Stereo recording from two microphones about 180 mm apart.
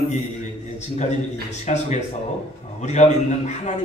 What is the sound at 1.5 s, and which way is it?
A man's voice, 40° left (ahead or behind).